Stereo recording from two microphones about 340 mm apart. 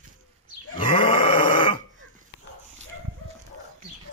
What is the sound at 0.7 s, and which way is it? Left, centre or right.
Grunt, centre.